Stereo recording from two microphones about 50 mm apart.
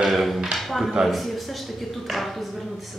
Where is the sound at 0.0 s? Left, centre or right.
Centre.